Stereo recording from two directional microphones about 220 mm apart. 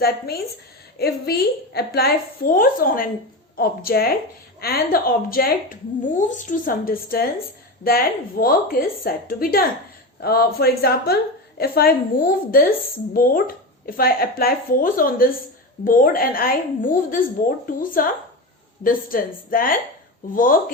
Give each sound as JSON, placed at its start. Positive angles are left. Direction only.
{"t": 0.0, "sound": "a woman's voice", "side_deg": 45}